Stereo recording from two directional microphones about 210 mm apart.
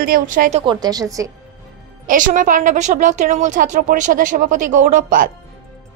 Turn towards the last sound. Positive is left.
turn(degrees=-40)  # may be behind; listen again after turning